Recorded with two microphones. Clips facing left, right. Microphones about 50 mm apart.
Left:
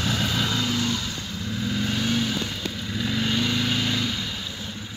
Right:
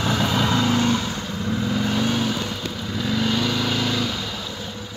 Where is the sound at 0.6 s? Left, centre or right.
Right.